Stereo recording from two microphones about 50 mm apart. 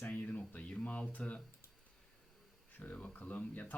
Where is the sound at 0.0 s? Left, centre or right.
Left.